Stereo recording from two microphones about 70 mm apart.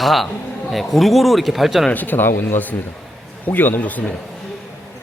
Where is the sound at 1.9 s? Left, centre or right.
Left.